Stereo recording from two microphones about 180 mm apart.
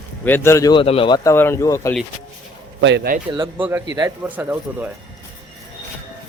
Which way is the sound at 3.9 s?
15° right (ahead or behind).